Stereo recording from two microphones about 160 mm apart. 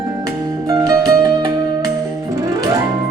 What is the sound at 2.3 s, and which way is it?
Music, 20° right (ahead or behind).